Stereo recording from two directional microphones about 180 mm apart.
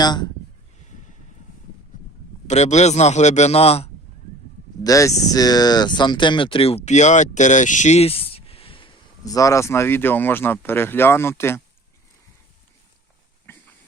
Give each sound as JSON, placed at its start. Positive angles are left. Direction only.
{"t": 0.0, "sound": "speech", "side_deg": 25}
{"t": 2.5, "sound": "a man's voice", "side_deg": 40}
{"t": 4.8, "sound": "speech", "side_deg": 20}
{"t": 13.5, "sound": "a sound", "side_deg": 10}